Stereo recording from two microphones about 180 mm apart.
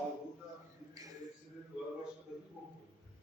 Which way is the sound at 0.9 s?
20° right (ahead or behind).